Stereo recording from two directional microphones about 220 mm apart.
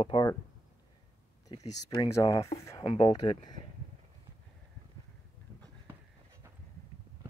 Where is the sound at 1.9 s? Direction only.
15° left (ahead or behind).